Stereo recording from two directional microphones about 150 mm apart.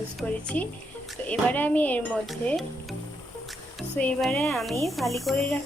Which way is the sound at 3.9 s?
5° left (ahead or behind).